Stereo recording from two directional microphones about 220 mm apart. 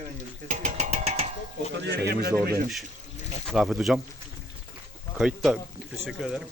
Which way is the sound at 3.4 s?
Centre (ahead or behind).